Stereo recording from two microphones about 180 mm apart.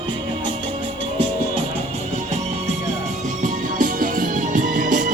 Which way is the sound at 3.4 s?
45° right (ahead or behind).